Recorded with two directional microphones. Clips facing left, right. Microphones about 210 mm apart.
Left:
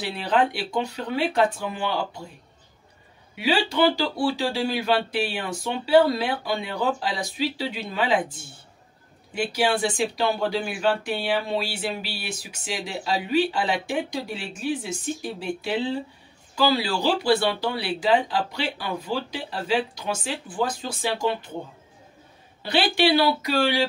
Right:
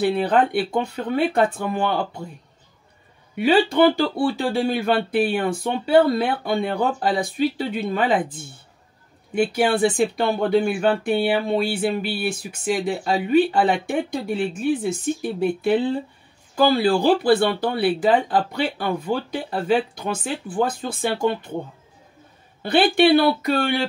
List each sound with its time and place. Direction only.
0.0 s speech: 55° right (ahead or behind)
3.3 s speech: 55° right (ahead or behind)
22.6 s speech: 55° right (ahead or behind)